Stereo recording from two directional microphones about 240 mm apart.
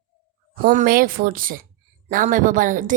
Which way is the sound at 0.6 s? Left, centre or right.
Right.